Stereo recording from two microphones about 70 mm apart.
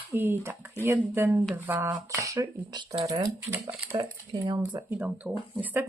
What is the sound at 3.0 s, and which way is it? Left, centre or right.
Speech, right.